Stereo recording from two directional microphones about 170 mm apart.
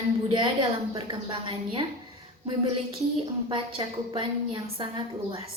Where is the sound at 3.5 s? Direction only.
30° right (ahead or behind).